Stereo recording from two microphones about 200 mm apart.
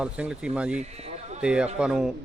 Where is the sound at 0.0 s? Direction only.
5° right (ahead or behind).